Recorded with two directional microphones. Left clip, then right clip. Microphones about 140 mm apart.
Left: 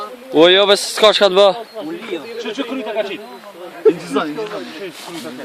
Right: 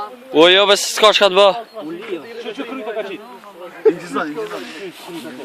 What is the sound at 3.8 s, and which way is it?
Speech, 20° right (ahead or behind).